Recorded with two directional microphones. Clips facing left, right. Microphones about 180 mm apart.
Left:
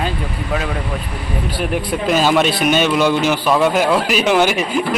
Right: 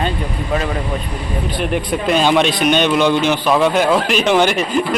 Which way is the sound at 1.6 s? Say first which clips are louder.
Right 1 dB; 5° left (ahead or behind).